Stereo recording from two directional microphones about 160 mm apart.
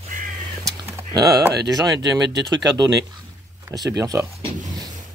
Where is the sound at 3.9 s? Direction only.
20° right (ahead or behind).